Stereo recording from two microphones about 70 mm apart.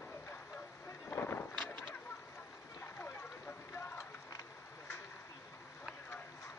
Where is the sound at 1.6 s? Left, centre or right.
Centre.